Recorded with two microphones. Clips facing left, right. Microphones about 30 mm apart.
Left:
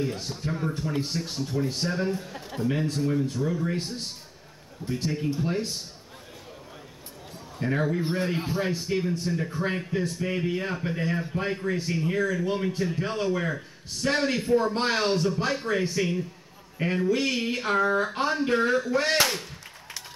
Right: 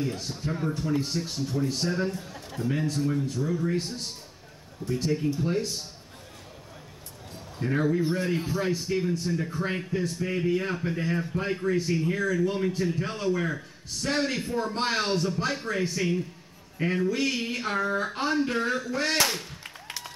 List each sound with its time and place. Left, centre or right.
0.0 s speech: centre
0.9 s speech: centre
7.5 s a man's voice: centre
8.0 s a man's voice: left
8.6 s speech: centre
18.0 s a sound: centre
18.5 s speech: centre